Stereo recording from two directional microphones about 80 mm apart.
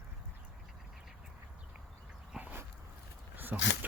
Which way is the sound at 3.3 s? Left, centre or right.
Right.